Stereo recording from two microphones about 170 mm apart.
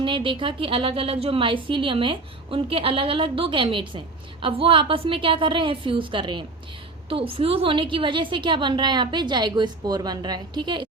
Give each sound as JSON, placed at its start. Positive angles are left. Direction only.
{"t": 0.0, "sound": "a woman's voice", "side_deg": -30}